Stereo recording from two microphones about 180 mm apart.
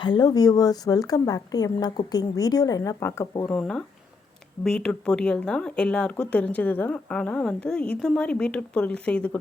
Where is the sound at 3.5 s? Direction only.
5° left (ahead or behind).